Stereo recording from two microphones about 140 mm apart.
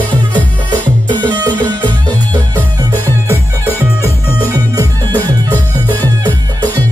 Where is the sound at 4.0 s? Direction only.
25° right (ahead or behind).